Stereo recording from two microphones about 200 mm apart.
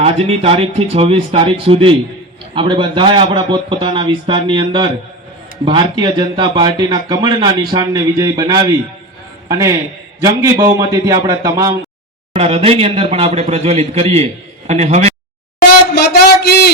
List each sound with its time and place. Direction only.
0.0 s a man's voice: 30° right (ahead or behind); by 11.8 s 15° right (ahead or behind)
12.4 s a man's voice: 30° right (ahead or behind)
16.0 s a sound: 55° left (ahead or behind)